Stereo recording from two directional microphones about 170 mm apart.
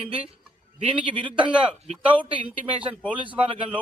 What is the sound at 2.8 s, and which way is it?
Speech, 5° right (ahead or behind).